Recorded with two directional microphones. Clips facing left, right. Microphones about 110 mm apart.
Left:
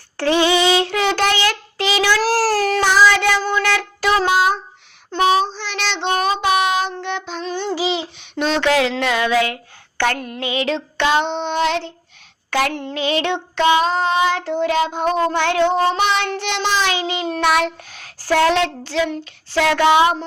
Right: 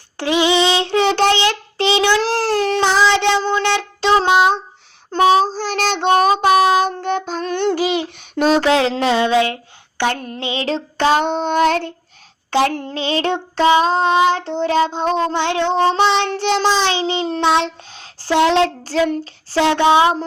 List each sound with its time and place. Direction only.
0.2 s child singing: 15° right (ahead or behind)
5.1 s child singing: 35° right (ahead or behind)
7.5 s child singing: 60° right (ahead or behind)
12.5 s child singing: 30° right (ahead or behind)
18.6 s child singing: 40° right (ahead or behind)